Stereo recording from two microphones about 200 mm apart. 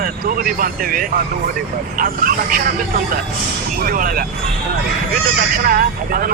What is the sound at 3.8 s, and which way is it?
Speech, 45° right (ahead or behind).